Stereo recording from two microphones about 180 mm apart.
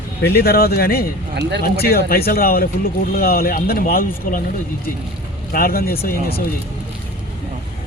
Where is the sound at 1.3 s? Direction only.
70° right (ahead or behind).